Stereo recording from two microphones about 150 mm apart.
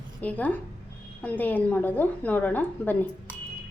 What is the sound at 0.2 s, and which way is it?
A woman's voice, 10° left (ahead or behind).